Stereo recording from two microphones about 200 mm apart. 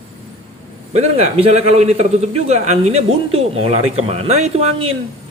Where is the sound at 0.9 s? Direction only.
35° right (ahead or behind).